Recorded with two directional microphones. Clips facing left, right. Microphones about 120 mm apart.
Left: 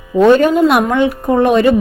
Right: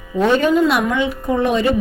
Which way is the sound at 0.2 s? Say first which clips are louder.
Left 6 dB; 50° left (ahead or behind).